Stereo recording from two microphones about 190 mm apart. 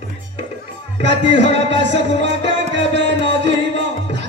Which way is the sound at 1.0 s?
70° right (ahead or behind).